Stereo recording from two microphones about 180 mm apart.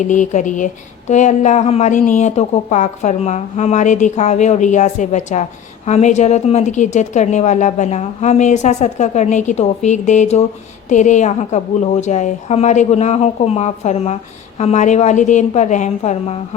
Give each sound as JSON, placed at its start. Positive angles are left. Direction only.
{"t": 0.0, "sound": "speech", "side_deg": 45}